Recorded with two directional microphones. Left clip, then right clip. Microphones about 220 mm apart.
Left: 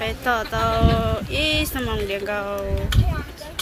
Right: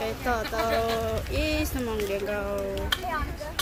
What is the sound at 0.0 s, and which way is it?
Speech, centre (ahead or behind).